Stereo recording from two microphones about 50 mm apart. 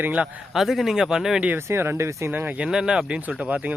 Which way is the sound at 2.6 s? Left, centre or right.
Centre.